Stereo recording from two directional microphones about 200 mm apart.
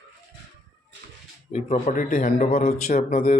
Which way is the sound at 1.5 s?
35° left (ahead or behind).